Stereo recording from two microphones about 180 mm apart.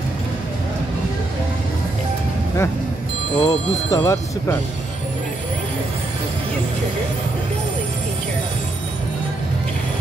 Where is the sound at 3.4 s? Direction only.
20° left (ahead or behind).